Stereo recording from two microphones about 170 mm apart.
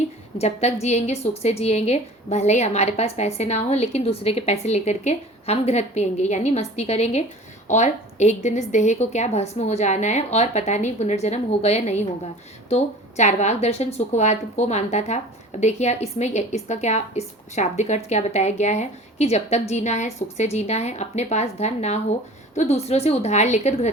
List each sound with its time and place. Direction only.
0.3 s a woman's voice: 40° left (ahead or behind)